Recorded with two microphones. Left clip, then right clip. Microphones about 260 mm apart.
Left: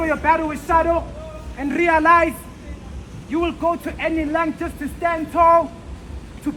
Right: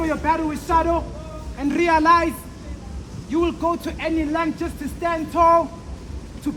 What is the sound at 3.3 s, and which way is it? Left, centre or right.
A man's voice, centre.